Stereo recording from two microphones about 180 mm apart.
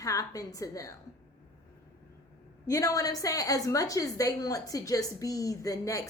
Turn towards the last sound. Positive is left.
turn(degrees=20)  # may be behind; listen again after turning